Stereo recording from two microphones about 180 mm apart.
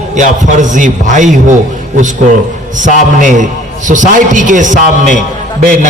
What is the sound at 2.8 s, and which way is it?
A man's voice, 45° right (ahead or behind).